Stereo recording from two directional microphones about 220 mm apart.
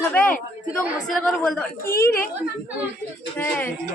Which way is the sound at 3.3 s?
10° left (ahead or behind).